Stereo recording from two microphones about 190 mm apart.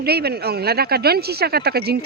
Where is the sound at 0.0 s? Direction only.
55° right (ahead or behind).